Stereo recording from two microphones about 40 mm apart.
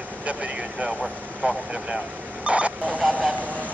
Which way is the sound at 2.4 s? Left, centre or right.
Right.